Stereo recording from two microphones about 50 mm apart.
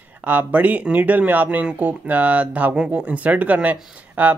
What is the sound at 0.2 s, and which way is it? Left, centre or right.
Speech, right.